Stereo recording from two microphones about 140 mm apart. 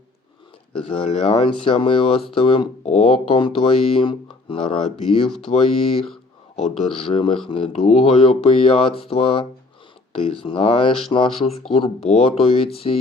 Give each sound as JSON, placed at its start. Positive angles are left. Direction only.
{"t": 0.8, "sound": "speech", "side_deg": 40}
{"t": 7.1, "sound": "speech", "side_deg": 40}